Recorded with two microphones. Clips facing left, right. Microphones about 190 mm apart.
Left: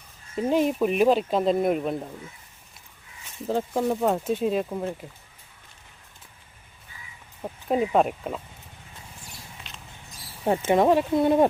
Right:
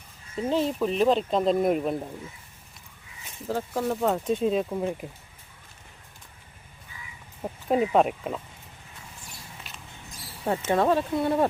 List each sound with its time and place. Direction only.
0.5 s speech: 15° left (ahead or behind)
3.5 s speech: 20° left (ahead or behind)
4.0 s speech: 5° left (ahead or behind)
7.4 s speech: centre (ahead or behind)
9.7 s a sound: 5° right (ahead or behind)
10.7 s speech: 15° left (ahead or behind)